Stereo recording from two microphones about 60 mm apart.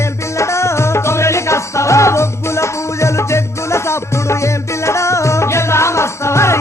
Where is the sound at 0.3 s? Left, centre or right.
Left.